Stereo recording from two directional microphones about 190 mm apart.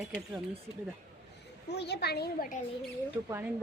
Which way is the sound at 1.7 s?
60° left (ahead or behind).